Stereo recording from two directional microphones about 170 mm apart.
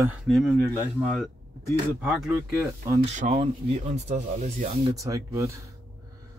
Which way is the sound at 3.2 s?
40° right (ahead or behind).